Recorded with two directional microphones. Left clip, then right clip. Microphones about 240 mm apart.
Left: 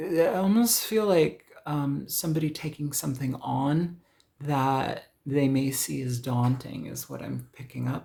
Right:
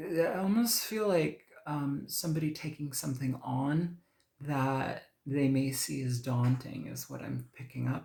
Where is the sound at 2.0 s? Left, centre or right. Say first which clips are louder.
Left 5 dB; left.